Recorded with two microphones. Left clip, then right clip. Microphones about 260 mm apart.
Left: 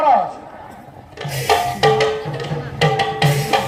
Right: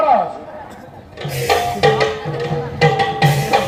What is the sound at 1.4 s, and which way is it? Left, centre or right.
Music, left.